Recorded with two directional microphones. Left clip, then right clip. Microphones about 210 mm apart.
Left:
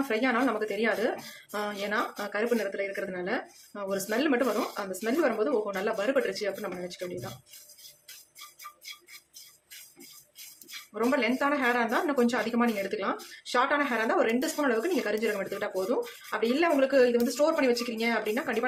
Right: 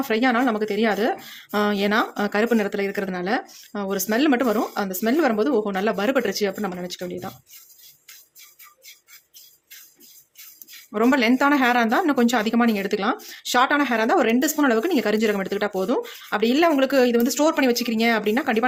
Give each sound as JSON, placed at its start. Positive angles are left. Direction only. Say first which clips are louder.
{"t": 0.1, "sound": "a woman's voice", "louder": "right 7 dB", "side_deg": -45}
{"t": 10.9, "sound": "a woman's voice", "louder": "right 8 dB", "side_deg": -50}